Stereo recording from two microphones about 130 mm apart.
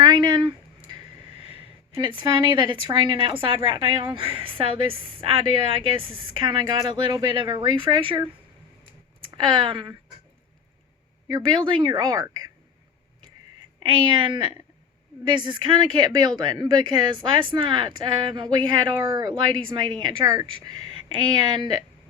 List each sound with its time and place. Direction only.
0.0 s a sound: 30° right (ahead or behind)
1.4 s speech: 45° right (ahead or behind)
9.3 s speech: 35° right (ahead or behind)
11.3 s speech: 35° right (ahead or behind)
12.0 s speech: 25° right (ahead or behind)
13.7 s speech: 35° right (ahead or behind)
18.9 s speech: 20° right (ahead or behind)
19.3 s speech: 40° right (ahead or behind)